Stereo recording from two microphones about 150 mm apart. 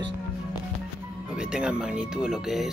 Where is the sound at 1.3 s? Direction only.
5° right (ahead or behind).